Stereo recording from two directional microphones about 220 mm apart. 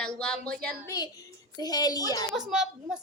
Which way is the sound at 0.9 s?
15° left (ahead or behind).